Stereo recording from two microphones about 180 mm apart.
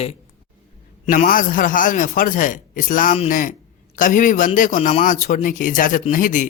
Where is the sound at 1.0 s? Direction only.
50° left (ahead or behind).